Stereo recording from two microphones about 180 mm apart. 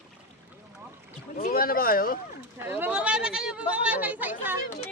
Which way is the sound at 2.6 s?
10° right (ahead or behind).